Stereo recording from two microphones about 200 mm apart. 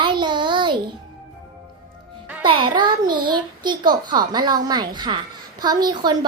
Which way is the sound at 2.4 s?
25° right (ahead or behind).